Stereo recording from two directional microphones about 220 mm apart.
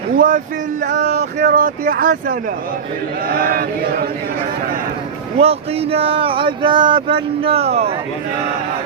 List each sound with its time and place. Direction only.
0.2 s speech: 35° right (ahead or behind)
5.4 s speech: 25° right (ahead or behind)